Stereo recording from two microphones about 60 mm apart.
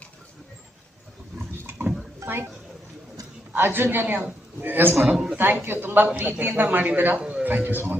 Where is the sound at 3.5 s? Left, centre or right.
Right.